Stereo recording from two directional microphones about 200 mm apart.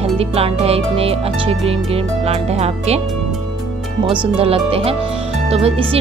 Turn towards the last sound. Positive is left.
turn(degrees=-30)  # may be behind; listen again after turning